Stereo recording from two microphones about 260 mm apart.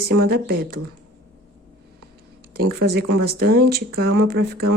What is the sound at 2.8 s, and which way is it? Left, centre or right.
Speech, right.